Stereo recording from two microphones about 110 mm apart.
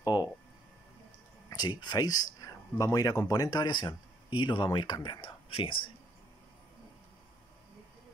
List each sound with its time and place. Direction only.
0.1 s speech: 35° left (ahead or behind)
1.5 s speech: 40° left (ahead or behind)